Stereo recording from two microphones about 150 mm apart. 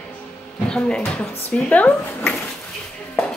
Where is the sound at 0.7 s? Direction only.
5° left (ahead or behind).